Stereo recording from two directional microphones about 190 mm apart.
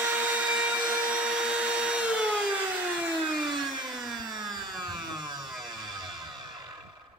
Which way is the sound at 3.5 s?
20° right (ahead or behind).